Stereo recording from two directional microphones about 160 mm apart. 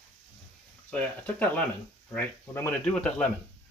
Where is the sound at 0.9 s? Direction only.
10° left (ahead or behind).